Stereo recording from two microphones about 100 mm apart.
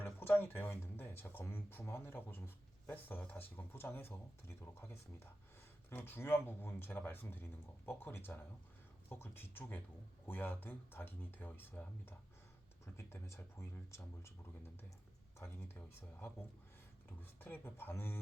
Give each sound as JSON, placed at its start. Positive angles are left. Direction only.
{"t": 0.0, "sound": "speech", "side_deg": 20}
{"t": 15.4, "sound": "speech", "side_deg": 25}
{"t": 17.2, "sound": "speech", "side_deg": 20}